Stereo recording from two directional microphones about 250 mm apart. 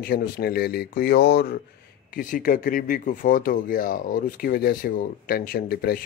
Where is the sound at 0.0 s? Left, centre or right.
Left.